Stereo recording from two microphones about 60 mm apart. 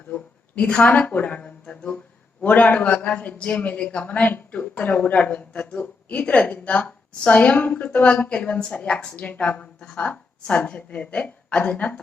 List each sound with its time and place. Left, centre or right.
0.1 s a man's voice: left